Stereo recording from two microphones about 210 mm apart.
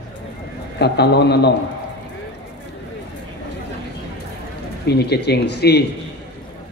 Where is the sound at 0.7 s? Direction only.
50° left (ahead or behind).